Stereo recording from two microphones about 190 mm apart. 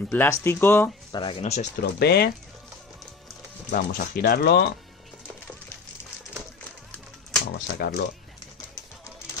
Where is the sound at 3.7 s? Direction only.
50° left (ahead or behind).